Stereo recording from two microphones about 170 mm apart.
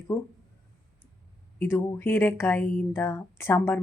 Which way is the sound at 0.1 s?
15° left (ahead or behind).